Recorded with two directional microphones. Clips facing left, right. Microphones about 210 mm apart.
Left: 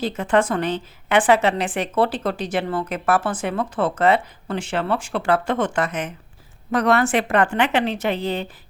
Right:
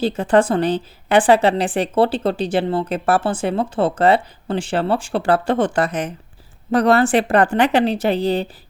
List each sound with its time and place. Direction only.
0.0 s a woman's voice: 30° right (ahead or behind)